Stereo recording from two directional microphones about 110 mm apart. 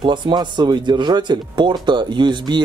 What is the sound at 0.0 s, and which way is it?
Speech, 45° right (ahead or behind).